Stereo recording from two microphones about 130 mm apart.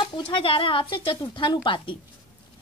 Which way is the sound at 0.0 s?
40° left (ahead or behind).